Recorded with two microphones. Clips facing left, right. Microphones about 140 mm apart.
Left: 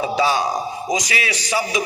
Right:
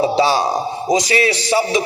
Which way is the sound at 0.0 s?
30° right (ahead or behind).